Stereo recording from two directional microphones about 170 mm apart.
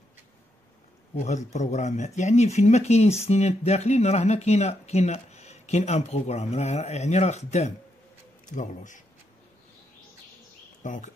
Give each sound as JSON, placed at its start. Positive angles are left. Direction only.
{"t": 1.1, "sound": "a man's voice", "side_deg": 45}
{"t": 10.8, "sound": "speech", "side_deg": 45}